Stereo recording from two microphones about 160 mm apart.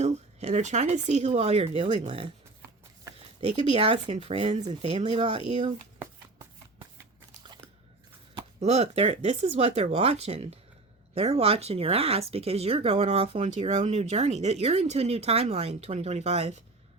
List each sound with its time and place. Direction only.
0.0 s speech: 45° right (ahead or behind)
8.4 s speech: 40° right (ahead or behind)